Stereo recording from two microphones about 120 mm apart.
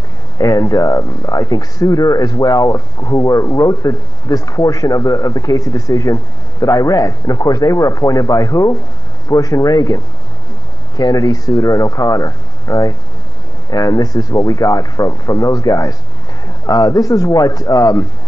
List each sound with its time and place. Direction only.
0.4 s speech: 30° left (ahead or behind)